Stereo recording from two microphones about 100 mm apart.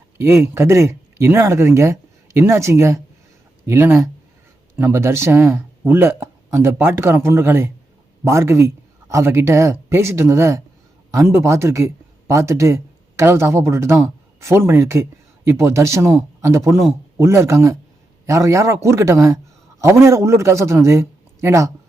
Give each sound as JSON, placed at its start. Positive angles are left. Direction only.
{"t": 0.2, "sound": "speech", "side_deg": -25}